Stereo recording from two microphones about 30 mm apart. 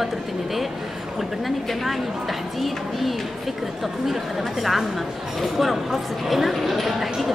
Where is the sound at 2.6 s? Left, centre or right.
Centre.